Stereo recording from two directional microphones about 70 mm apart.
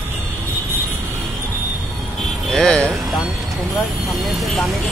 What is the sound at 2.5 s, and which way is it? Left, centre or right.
Speech, centre.